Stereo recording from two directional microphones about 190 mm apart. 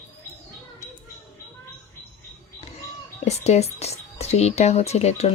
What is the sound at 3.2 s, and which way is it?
Speech, 35° left (ahead or behind).